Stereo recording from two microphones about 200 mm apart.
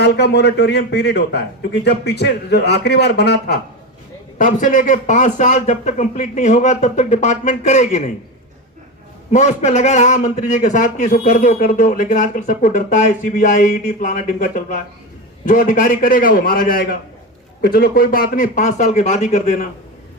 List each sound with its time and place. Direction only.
0.0 s a man's voice: 55° left (ahead or behind)
4.4 s a man's voice: 40° left (ahead or behind)
9.3 s a man's voice: 35° left (ahead or behind)